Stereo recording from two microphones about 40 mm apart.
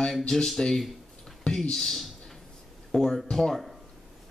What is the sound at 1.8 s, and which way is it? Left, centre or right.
A man's voice, centre.